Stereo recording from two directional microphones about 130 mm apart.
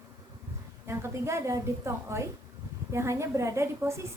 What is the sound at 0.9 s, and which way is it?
A woman's voice, 20° right (ahead or behind).